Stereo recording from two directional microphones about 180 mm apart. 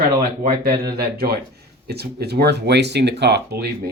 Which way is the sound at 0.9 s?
60° right (ahead or behind).